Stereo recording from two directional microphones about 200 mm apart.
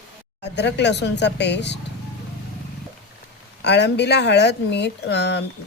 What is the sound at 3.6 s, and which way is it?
Speech, 60° left (ahead or behind).